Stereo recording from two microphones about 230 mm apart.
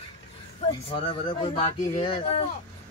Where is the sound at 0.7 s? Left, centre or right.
Centre.